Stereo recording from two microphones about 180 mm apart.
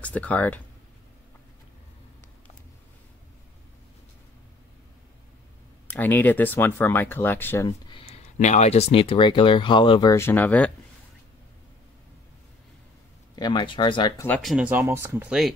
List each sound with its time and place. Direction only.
0.0 s speech: 10° left (ahead or behind)
5.9 s speech: 10° left (ahead or behind)
7.9 s speech: 35° left (ahead or behind); by 10.7 s 10° left (ahead or behind)
13.4 s speech: 25° left (ahead or behind)
14.2 s speech: 5° left (ahead or behind)